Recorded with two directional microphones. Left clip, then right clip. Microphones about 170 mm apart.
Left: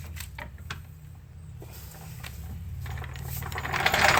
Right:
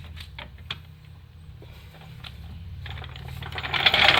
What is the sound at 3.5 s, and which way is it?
Coin, 10° left (ahead or behind).